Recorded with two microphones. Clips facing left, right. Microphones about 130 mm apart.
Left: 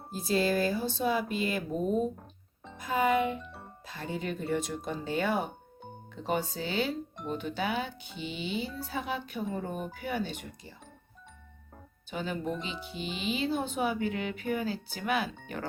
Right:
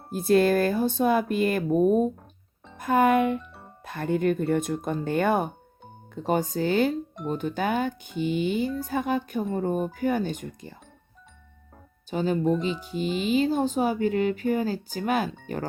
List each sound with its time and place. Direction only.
0.1 s speech: 55° right (ahead or behind)
12.1 s speech: 40° right (ahead or behind)